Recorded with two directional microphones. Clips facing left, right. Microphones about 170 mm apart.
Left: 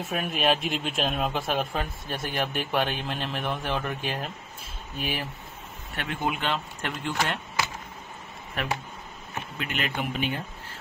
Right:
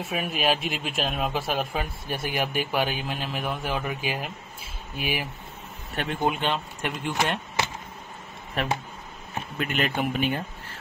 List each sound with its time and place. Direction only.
0.1 s a man's voice: centre (ahead or behind)
5.9 s speech: 30° right (ahead or behind)
9.6 s speech: 45° right (ahead or behind)